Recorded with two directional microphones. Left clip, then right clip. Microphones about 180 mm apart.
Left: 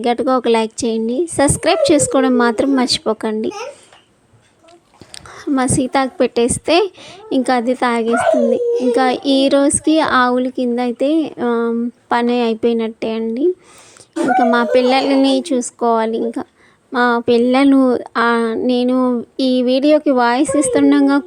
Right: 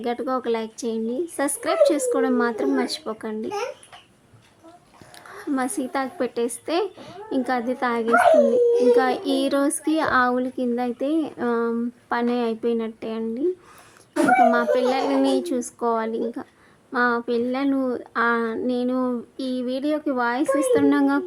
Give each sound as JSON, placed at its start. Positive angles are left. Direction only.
{"t": 0.0, "sound": "speech", "side_deg": 35}
{"t": 5.1, "sound": "speech", "side_deg": 30}